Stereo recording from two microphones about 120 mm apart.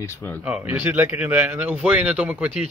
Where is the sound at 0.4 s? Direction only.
10° right (ahead or behind).